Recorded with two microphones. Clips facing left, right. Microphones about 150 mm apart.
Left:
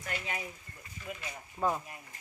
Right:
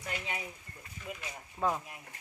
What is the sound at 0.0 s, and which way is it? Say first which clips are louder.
Speech: left 1 dB; 15° right (ahead or behind).